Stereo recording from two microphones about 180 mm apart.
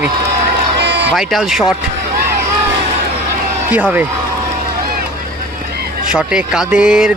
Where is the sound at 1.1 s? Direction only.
Centre (ahead or behind).